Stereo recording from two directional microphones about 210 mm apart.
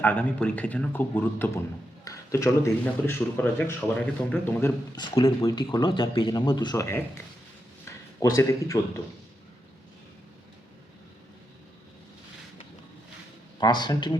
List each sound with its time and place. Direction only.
0.0 s speech: 10° left (ahead or behind)
5.1 s speech: 25° left (ahead or behind)
8.2 s speech: 15° left (ahead or behind)
13.6 s speech: 20° left (ahead or behind)